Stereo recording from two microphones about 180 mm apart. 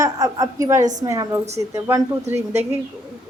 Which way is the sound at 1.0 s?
15° right (ahead or behind).